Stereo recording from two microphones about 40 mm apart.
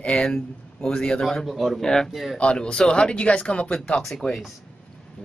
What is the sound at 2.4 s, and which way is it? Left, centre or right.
Speech, left.